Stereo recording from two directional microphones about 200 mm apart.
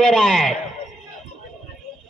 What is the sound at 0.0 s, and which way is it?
Speech, centre (ahead or behind).